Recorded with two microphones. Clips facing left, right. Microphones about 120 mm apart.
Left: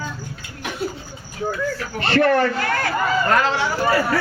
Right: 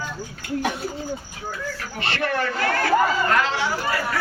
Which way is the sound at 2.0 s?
45° left (ahead or behind).